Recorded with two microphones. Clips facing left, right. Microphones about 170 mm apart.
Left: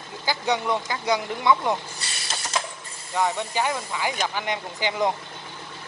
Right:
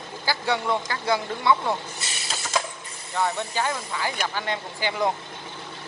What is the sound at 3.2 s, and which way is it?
Speech, 15° left (ahead or behind).